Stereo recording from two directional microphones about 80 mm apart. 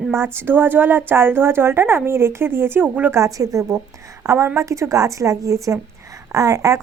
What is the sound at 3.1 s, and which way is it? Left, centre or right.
A woman's voice, right.